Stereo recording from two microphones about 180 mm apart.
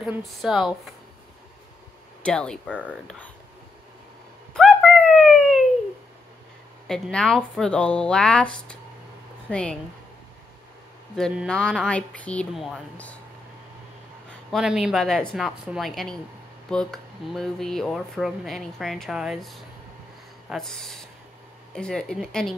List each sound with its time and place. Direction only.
0.0 s speech: centre (ahead or behind)
2.2 s speech: 5° left (ahead or behind)
4.6 s a sound: 5° left (ahead or behind)
6.9 s speech: 5° left (ahead or behind)
9.5 s speech: 5° left (ahead or behind)
11.1 s speech: 5° left (ahead or behind)
14.5 s speech: 5° right (ahead or behind)